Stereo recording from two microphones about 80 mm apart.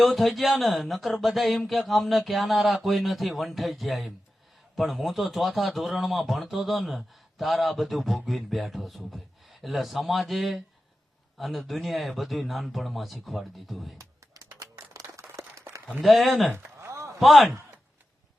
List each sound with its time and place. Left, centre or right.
0.0 s a man's voice: centre
14.0 s a sound: right
15.9 s a man's voice: centre
16.8 s chop: right
17.2 s a man's voice: centre